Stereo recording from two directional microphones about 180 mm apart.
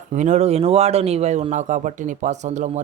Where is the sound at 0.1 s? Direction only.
40° right (ahead or behind).